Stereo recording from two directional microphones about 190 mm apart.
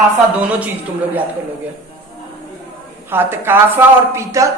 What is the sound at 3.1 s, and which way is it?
A woman's voice, 10° right (ahead or behind).